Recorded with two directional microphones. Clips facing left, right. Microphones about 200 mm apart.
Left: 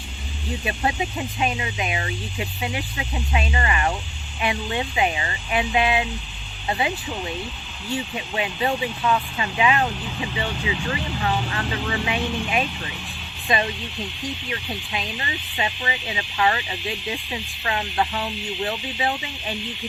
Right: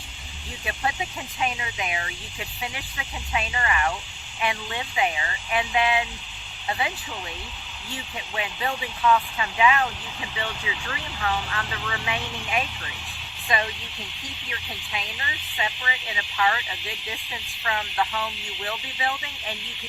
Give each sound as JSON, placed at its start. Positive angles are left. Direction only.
{"t": 0.6, "sound": "speech", "side_deg": 25}
{"t": 8.4, "sound": "speech", "side_deg": 25}
{"t": 14.5, "sound": "speech", "side_deg": 30}